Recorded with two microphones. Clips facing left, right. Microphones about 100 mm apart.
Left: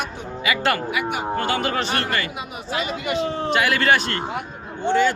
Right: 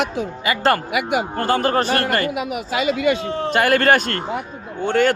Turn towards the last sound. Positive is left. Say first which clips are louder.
# right 2 dB
turn(degrees=-55)  # may be behind; listen again after turning